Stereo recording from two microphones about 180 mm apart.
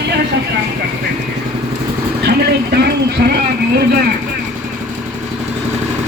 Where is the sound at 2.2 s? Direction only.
65° right (ahead or behind).